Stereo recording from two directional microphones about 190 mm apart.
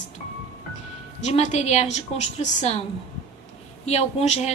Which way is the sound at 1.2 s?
40° left (ahead or behind).